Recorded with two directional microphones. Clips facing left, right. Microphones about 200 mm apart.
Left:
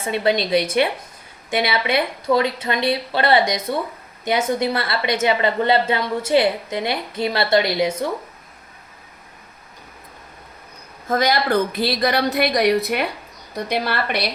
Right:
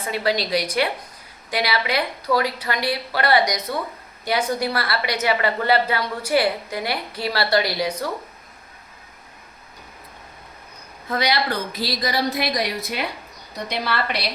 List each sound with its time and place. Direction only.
0.0 s a woman's voice: 25° left (ahead or behind)
11.1 s a woman's voice: 45° left (ahead or behind)